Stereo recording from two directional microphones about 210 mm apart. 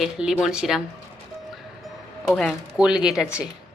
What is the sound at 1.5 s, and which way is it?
Music, centre (ahead or behind).